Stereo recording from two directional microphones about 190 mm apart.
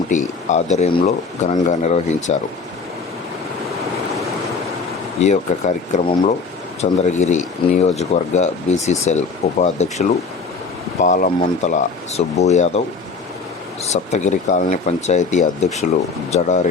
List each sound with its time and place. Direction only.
0.1 s speech: 40° left (ahead or behind)
5.2 s speech: 35° left (ahead or behind)
13.8 s speech: 35° left (ahead or behind)